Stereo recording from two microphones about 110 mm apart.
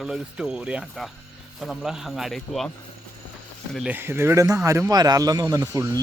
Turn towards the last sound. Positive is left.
turn(degrees=-30)  # may be behind; listen again after turning